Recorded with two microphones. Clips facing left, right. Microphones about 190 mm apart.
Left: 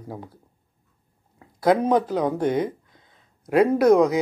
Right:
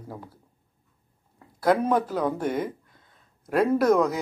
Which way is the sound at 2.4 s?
5° right (ahead or behind).